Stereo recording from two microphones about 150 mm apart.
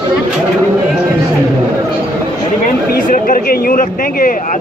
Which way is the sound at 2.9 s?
80° left.